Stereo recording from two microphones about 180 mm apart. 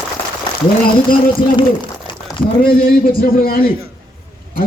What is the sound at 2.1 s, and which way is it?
Crumpling, 25° left (ahead or behind).